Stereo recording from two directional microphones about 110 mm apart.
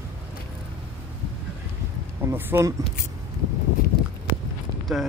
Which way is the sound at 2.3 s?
25° right (ahead or behind).